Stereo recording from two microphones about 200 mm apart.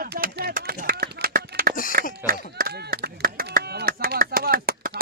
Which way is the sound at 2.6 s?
50° right (ahead or behind).